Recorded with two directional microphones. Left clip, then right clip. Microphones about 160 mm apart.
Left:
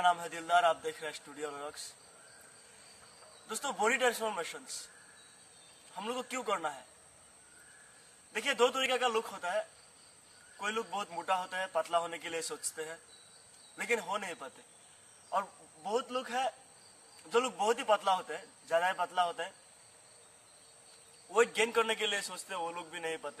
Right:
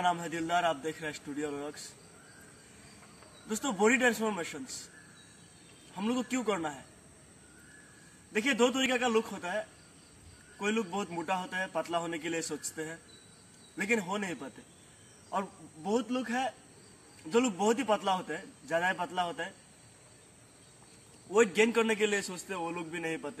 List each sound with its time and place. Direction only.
0.0 s a man's voice: 20° left (ahead or behind)
3.7 s a man's voice: 15° left (ahead or behind)
5.9 s a man's voice: 15° left (ahead or behind)
8.3 s a man's voice: 15° left (ahead or behind)
21.5 s a man's voice: 15° left (ahead or behind)